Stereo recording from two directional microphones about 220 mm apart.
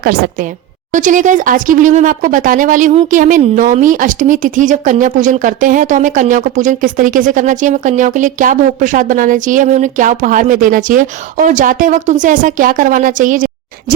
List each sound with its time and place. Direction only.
0.9 s speech: 35° right (ahead or behind)